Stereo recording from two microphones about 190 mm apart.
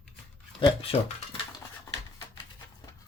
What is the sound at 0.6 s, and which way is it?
Speech, 30° left (ahead or behind).